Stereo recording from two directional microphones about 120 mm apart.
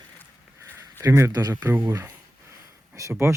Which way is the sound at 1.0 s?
25° right (ahead or behind).